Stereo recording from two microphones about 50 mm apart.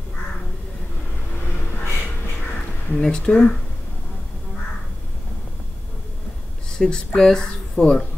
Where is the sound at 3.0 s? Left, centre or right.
Centre.